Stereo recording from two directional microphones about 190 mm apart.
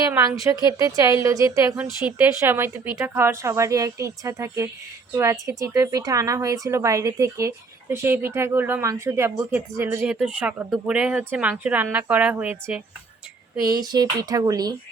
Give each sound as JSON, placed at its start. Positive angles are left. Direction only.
{"t": 0.1, "sound": "a woman's voice", "side_deg": -15}
{"t": 13.8, "sound": "speech", "side_deg": -20}